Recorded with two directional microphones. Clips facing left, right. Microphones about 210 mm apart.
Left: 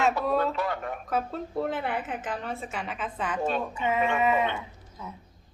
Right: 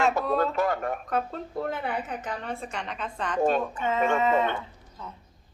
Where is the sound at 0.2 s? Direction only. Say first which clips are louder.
Right 1 dB; 45° right (ahead or behind).